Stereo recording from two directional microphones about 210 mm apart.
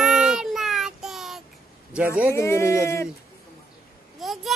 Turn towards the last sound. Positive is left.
turn(degrees=0)  # may be behind; listen again after turning